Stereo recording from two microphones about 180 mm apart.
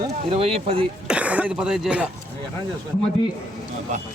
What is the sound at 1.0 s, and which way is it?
Speech, 5° right (ahead or behind).